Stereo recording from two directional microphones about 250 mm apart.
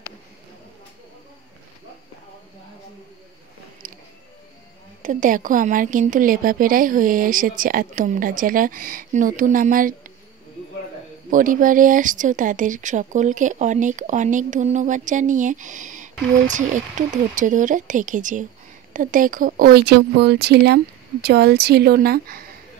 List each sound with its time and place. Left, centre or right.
5.0 s speech: right
11.2 s speech: right